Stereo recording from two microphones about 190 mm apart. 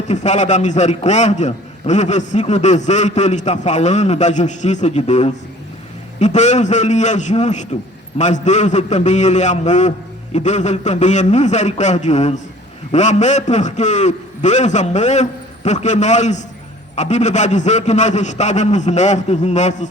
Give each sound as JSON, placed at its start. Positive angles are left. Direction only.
{"t": 0.1, "sound": "a man's voice", "side_deg": 40}